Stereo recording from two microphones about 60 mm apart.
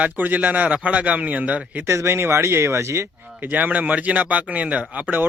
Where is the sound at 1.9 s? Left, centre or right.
Right.